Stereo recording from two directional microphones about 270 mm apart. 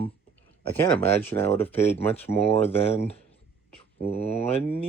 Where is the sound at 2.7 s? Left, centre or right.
Left.